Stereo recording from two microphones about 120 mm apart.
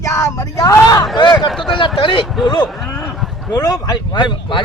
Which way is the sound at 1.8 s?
45° left (ahead or behind).